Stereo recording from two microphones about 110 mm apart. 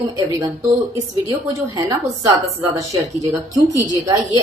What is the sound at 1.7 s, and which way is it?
A woman's voice, 35° right (ahead or behind).